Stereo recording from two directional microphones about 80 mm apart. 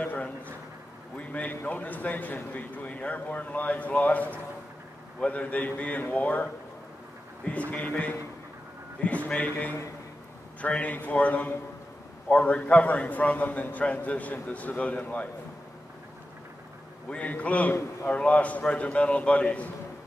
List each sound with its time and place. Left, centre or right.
0.0 s a sound: centre
1.1 s a man's voice: centre
7.7 s a man's voice: centre
17.1 s a man's voice: centre